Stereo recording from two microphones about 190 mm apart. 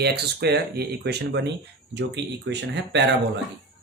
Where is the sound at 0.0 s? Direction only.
60° right (ahead or behind).